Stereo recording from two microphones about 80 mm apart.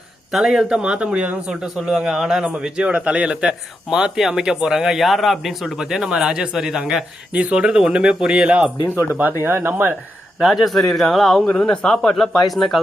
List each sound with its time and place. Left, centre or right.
0.3 s a man's voice: centre
1.6 s a man's voice: centre
9.4 s speech: right
10.4 s a man's voice: centre